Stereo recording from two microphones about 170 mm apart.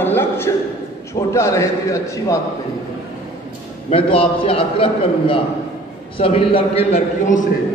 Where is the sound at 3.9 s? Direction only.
30° left (ahead or behind).